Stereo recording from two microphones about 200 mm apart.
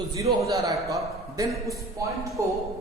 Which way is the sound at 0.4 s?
15° right (ahead or behind).